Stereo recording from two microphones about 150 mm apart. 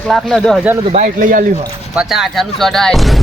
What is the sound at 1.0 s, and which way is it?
Speech, 60° right (ahead or behind).